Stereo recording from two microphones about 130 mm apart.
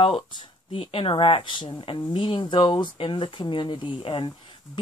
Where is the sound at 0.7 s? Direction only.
45° left (ahead or behind).